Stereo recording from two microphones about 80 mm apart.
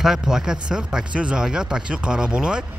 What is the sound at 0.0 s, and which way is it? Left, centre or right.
Speech, centre.